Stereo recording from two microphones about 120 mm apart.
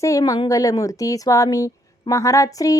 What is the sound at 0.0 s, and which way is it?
Speech, 30° left (ahead or behind).